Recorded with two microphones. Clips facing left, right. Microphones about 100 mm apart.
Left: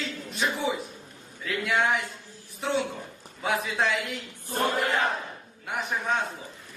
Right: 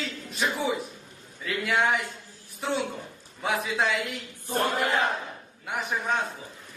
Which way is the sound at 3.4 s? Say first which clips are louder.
Even; centre (ahead or behind).